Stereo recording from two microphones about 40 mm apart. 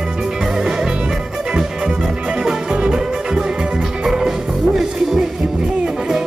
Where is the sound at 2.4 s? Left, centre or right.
Right.